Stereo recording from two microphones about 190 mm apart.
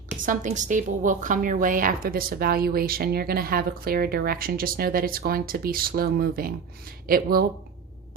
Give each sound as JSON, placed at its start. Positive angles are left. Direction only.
{"t": 0.3, "sound": "a woman's voice", "side_deg": -40}